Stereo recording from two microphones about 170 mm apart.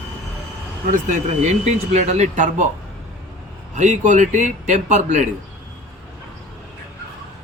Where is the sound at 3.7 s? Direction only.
45° right (ahead or behind).